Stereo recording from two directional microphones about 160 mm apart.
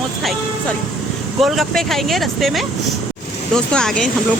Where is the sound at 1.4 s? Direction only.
Centre (ahead or behind).